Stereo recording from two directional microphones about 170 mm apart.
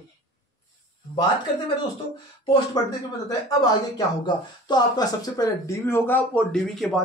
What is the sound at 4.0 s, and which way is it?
Speech, 25° left (ahead or behind).